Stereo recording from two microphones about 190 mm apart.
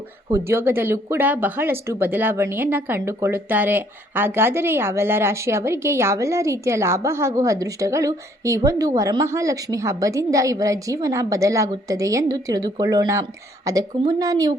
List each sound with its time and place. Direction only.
0.3 s a woman's voice: 15° right (ahead or behind)